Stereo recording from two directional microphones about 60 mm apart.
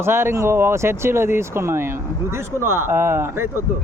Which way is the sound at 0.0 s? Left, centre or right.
Right.